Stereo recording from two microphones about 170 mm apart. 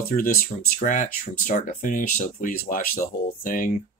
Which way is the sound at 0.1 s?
55° left (ahead or behind).